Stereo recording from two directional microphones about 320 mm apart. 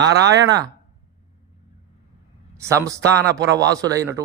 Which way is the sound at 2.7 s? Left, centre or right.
Centre.